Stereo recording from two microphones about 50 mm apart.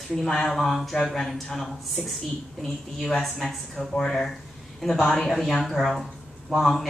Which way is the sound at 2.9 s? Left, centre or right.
Centre.